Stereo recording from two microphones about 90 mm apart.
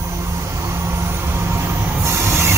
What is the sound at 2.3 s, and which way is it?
Printer, 30° right (ahead or behind).